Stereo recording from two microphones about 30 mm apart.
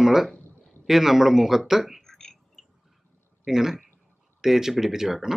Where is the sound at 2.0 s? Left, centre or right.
Centre.